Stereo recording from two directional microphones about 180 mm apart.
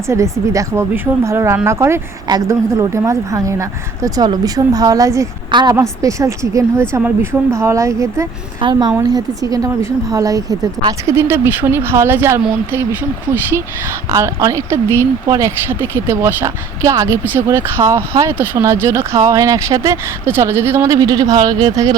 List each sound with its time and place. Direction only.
0.1 s a woman's voice: 15° right (ahead or behind)
14.1 s speech: 15° right (ahead or behind)